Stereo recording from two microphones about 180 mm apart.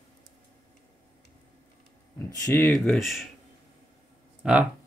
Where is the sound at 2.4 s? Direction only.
15° left (ahead or behind).